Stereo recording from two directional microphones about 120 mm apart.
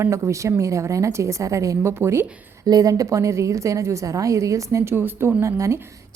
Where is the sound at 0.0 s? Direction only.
25° right (ahead or behind).